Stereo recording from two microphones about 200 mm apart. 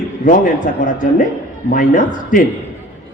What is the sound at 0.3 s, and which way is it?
A man's voice, 40° left (ahead or behind).